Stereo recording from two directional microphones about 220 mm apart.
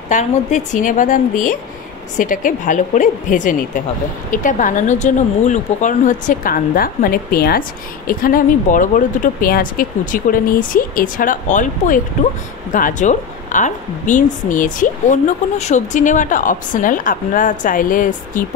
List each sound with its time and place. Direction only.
0.1 s a woman's voice: 35° left (ahead or behind)